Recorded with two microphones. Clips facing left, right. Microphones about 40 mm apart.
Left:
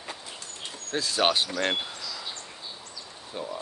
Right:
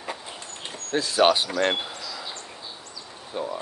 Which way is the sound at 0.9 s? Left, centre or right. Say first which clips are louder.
Right 5 dB; centre.